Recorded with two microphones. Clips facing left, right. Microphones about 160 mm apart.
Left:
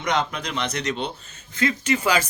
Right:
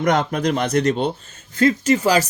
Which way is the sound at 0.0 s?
50° right (ahead or behind).